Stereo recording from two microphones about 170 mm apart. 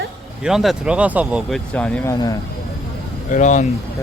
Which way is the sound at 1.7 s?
5° left (ahead or behind).